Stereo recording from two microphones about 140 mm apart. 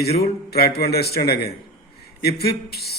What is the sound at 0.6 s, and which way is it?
Speech, 90° left.